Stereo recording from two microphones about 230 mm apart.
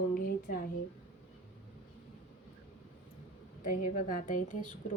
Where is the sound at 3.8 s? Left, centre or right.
Left.